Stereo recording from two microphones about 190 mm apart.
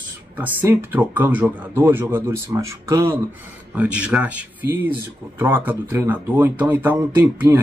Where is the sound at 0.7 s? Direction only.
10° right (ahead or behind).